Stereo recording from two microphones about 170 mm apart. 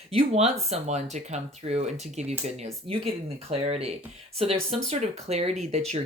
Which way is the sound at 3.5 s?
40° right (ahead or behind).